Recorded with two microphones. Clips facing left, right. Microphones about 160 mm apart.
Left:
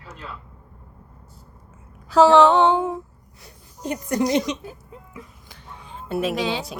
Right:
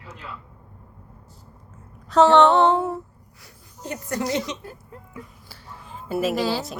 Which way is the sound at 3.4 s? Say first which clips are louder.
Left 6 dB; 15° left (ahead or behind).